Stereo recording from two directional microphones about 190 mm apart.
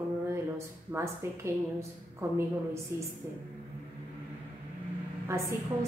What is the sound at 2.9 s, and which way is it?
Speech, 15° right (ahead or behind).